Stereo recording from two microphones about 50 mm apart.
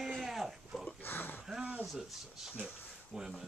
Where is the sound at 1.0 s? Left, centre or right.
Left.